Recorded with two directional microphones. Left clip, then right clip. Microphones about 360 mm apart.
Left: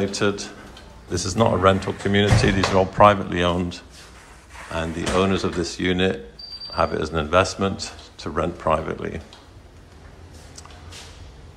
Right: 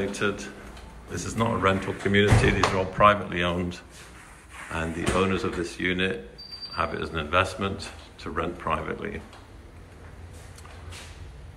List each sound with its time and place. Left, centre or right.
0.0 s speech: centre